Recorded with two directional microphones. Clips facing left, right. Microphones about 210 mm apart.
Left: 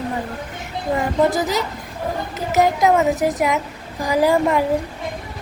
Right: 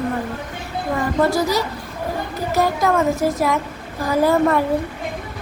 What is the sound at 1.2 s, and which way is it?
A woman's voice, 20° left (ahead or behind).